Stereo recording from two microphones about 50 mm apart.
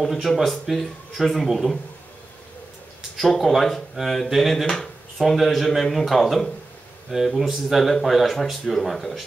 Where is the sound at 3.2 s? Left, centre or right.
Centre.